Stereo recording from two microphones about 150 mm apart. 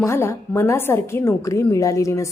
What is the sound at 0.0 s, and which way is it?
A woman's voice, 15° left (ahead or behind).